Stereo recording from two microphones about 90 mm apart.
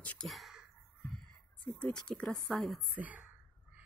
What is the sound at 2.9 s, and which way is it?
Speech, 15° right (ahead or behind).